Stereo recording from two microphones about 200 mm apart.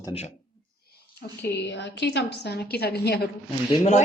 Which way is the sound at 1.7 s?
60° left (ahead or behind).